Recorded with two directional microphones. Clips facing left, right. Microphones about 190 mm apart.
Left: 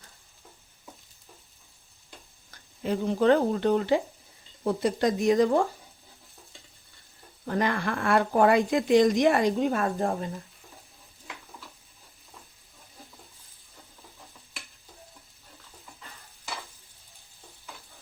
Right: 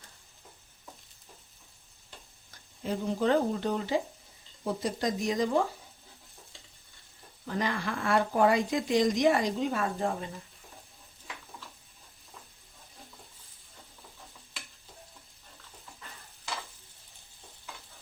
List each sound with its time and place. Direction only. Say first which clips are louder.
2.8 s speech: left 5 dB; 60° left (ahead or behind)
7.4 s speech: left 5 dB; 55° left (ahead or behind)